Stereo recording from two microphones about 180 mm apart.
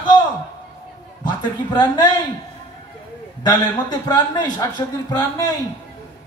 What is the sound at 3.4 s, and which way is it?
A man's voice, 20° left (ahead or behind).